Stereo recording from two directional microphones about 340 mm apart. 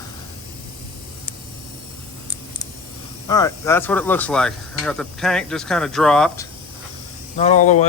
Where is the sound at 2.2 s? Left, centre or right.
Centre.